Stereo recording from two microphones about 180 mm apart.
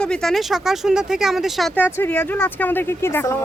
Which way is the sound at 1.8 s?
10° left (ahead or behind).